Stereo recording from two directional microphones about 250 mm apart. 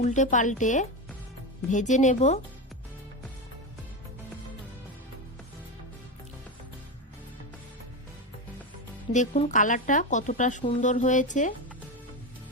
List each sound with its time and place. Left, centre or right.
0.0 s a woman's voice: left
9.1 s a woman's voice: left